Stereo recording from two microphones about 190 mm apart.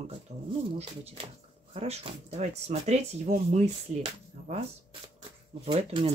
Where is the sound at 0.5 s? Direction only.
30° right (ahead or behind).